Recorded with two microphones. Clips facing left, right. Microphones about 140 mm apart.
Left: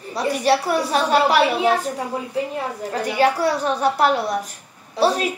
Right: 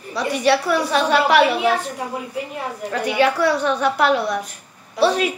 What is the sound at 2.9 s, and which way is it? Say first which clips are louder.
A woman's voice: even; 35° left (ahead or behind).